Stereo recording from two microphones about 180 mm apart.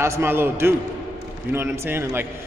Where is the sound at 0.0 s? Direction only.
15° right (ahead or behind).